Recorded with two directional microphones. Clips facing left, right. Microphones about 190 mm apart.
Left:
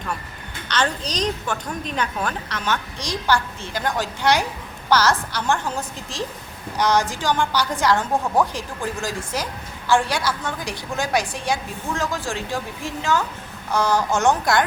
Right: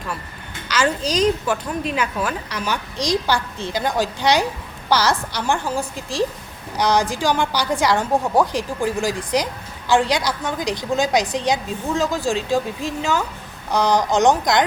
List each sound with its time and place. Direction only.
0.7 s a woman's voice: 5° right (ahead or behind)